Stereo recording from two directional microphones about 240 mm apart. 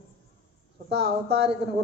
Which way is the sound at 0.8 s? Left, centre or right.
Right.